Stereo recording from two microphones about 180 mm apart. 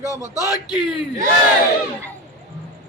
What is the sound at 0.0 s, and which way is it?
Speech, 15° left (ahead or behind).